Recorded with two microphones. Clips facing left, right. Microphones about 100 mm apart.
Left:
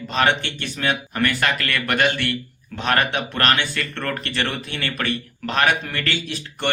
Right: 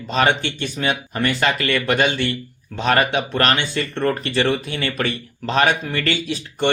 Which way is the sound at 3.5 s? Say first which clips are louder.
Right 2 dB; 25° right (ahead or behind).